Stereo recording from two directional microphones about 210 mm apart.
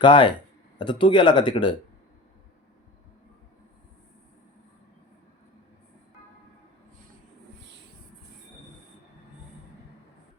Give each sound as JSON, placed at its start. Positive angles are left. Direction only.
{"t": 0.0, "sound": "speech", "side_deg": 25}